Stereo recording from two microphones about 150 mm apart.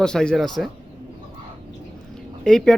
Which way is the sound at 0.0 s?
5° left (ahead or behind).